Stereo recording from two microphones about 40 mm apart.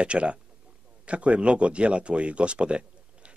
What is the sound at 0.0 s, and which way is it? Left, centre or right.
Speech, right.